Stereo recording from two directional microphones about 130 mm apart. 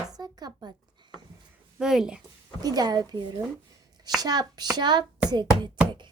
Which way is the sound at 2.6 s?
30° right (ahead or behind).